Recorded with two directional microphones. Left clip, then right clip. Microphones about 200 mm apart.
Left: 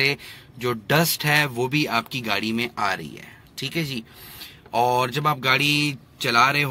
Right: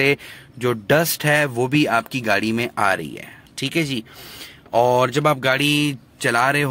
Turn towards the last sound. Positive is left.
turn(degrees=-25)  # may be behind; listen again after turning